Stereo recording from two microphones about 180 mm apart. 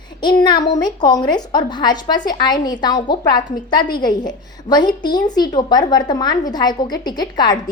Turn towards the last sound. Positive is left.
turn(degrees=20)  # may be behind; listen again after turning